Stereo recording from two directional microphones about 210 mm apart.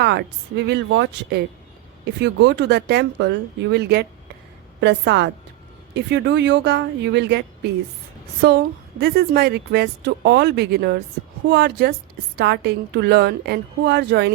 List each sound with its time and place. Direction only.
0.0 s a woman's voice: 50° right (ahead or behind)